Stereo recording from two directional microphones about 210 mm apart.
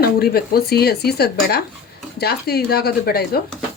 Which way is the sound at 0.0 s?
45° left (ahead or behind).